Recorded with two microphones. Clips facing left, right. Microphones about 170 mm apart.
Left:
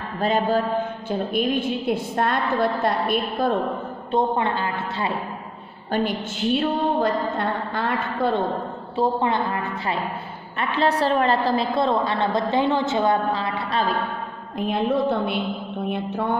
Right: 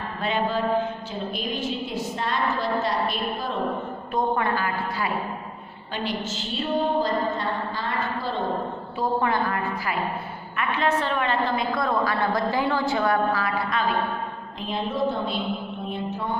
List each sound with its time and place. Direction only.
0.2 s a sound: 40° left (ahead or behind)
1.1 s a woman's voice: 55° left (ahead or behind)
4.1 s a woman's voice: 25° left (ahead or behind)
5.9 s a woman's voice: 50° left (ahead or behind)
8.9 s a woman's voice: 25° left (ahead or behind)
10.6 s a woman's voice: 35° left (ahead or behind)
14.7 s a woman's voice: 60° left (ahead or behind)